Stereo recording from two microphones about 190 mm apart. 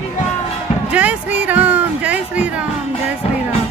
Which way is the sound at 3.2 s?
30° left (ahead or behind).